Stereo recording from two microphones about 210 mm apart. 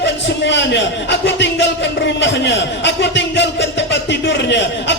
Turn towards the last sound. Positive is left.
turn(degrees=55)  # may be behind; listen again after turning